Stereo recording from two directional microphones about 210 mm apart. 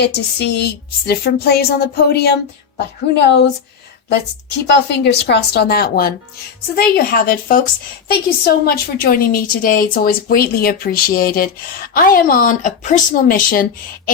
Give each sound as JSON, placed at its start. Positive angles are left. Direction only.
{"t": 0.0, "sound": "a woman's voice", "side_deg": 50}
{"t": 4.6, "sound": "a woman's voice", "side_deg": 55}